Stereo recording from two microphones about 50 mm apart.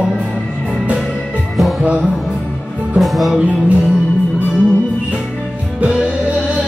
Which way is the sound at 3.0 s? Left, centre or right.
Centre.